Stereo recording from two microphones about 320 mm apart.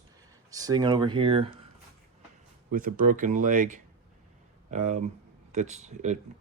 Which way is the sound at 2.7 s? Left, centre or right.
Right.